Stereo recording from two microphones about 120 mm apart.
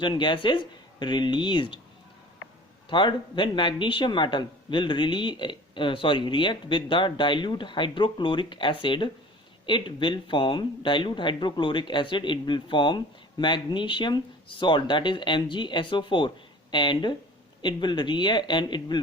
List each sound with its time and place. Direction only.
0.0 s speech: 40° left (ahead or behind)
2.9 s speech: 40° left (ahead or behind)